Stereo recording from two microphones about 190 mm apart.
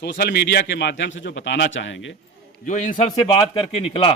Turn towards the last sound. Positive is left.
turn(degrees=30)  # may be behind; listen again after turning